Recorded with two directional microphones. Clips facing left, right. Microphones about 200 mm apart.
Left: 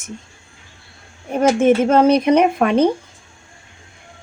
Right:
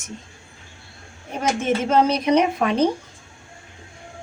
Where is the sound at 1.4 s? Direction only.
55° left (ahead or behind).